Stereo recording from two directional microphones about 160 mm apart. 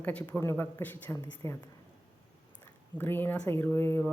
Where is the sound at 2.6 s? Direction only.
15° left (ahead or behind).